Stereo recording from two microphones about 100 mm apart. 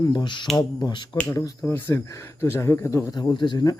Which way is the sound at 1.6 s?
20° left (ahead or behind).